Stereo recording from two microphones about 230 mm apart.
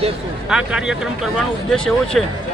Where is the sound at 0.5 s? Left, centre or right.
Centre.